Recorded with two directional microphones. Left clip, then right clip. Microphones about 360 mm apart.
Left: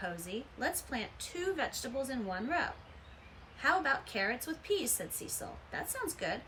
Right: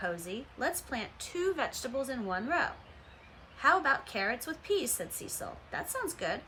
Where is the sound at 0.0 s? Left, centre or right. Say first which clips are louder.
Right 4 dB; centre.